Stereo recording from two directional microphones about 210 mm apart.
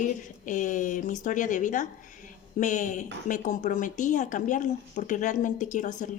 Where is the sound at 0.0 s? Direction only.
40° left (ahead or behind).